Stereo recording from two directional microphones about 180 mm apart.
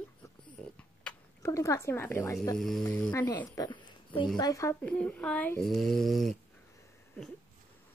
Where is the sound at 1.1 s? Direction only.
15° left (ahead or behind).